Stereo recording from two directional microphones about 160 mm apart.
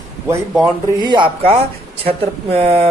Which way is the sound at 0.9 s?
30° right (ahead or behind).